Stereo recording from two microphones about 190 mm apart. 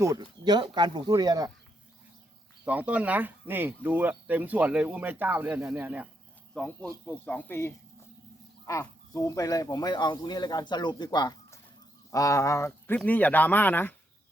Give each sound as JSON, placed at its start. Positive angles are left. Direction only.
{"t": 0.2, "sound": "speech", "side_deg": -25}
{"t": 2.6, "sound": "speech", "side_deg": -5}
{"t": 6.5, "sound": "speech", "side_deg": 5}